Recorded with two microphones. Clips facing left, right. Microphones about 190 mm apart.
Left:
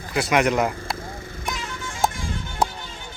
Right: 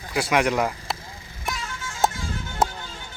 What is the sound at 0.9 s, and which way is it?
Vehicle, 55° left (ahead or behind).